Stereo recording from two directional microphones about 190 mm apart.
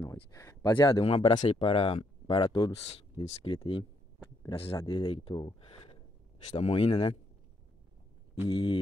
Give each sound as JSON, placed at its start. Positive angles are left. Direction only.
{"t": 0.0, "sound": "speech", "side_deg": 15}
{"t": 8.5, "sound": "speech", "side_deg": 25}